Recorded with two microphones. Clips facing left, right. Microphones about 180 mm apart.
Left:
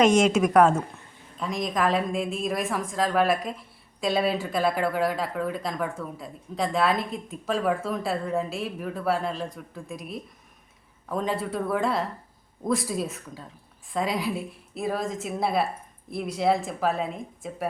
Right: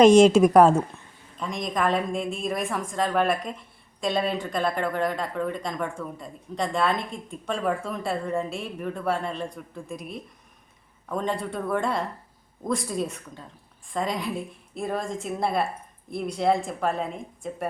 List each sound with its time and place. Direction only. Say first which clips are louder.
0.0 s speech: right 5 dB; 35° right (ahead or behind)
1.4 s speech: left 1 dB; centre (ahead or behind)